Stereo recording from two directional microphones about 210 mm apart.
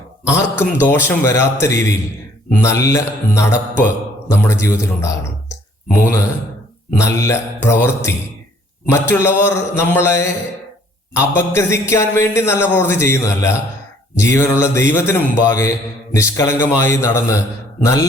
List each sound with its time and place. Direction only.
0.3 s speech: 10° left (ahead or behind)
8.9 s speech: 10° left (ahead or behind)